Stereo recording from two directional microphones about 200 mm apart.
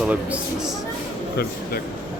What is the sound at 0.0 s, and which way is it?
Speech, 5° right (ahead or behind).